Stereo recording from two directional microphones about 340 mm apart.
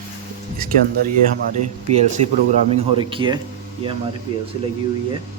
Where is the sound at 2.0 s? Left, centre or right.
Centre.